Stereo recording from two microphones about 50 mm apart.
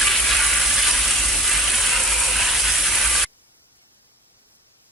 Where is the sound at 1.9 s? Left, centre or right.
Centre.